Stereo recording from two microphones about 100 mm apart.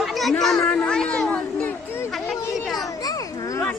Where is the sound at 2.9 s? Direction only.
35° left (ahead or behind).